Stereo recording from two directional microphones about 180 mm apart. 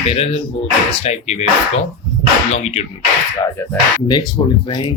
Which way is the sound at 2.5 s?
35° left (ahead or behind).